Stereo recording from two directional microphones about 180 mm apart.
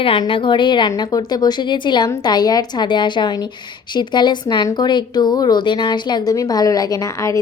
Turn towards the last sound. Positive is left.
turn(degrees=15)  # may be behind; listen again after turning